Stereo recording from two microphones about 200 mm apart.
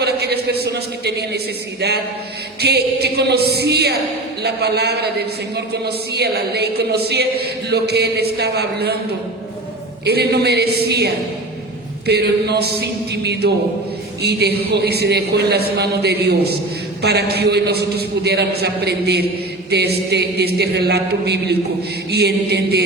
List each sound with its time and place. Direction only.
0.0 s a sound: 55° right (ahead or behind)
2.6 s a man's voice: 55° right (ahead or behind)
10.1 s a man's voice: 55° right (ahead or behind)